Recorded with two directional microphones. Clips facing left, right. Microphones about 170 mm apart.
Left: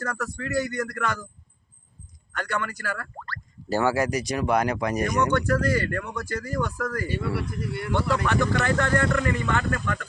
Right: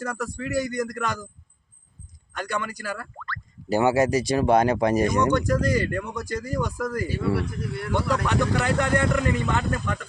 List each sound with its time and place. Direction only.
0.0 s speech: 10° right (ahead or behind)
2.3 s speech: 15° right (ahead or behind)
3.2 s speech: 35° left (ahead or behind)
3.7 s speech: 20° right (ahead or behind)
5.2 s speech: 15° right (ahead or behind)
7.3 s speech: centre (ahead or behind)
8.6 s speech: 15° right (ahead or behind)